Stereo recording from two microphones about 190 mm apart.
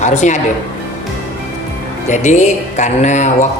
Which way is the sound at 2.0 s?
40° left (ahead or behind).